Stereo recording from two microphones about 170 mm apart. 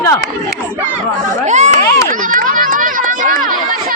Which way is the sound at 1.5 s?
45° right (ahead or behind).